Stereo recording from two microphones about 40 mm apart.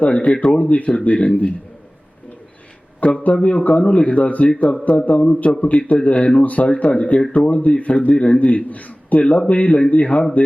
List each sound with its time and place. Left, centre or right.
0.0 s a man's voice: left
3.0 s a man's voice: left